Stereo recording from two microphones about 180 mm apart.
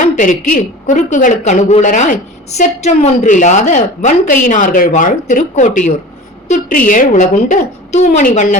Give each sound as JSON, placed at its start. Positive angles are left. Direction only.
{"t": 0.0, "sound": "a woman's voice", "side_deg": 45}